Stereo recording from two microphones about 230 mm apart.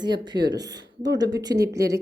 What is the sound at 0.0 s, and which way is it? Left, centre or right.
Speech, centre.